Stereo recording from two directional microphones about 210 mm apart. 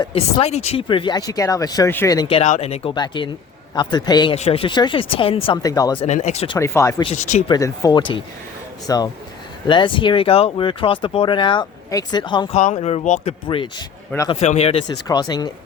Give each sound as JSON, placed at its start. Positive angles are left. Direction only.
{"t": 0.0, "sound": "speech", "side_deg": 25}
{"t": 2.3, "sound": "speech", "side_deg": 30}
{"t": 6.1, "sound": "speech", "side_deg": 35}
{"t": 6.6, "sound": "speech", "side_deg": 15}
{"t": 7.0, "sound": "speech", "side_deg": 35}
{"t": 7.4, "sound": "speech", "side_deg": 20}
{"t": 12.5, "sound": "speech", "side_deg": 35}
{"t": 14.8, "sound": "speech", "side_deg": 20}